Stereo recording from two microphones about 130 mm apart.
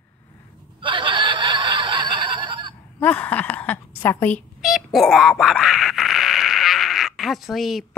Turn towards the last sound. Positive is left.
turn(degrees=0)  # may be behind; listen again after turning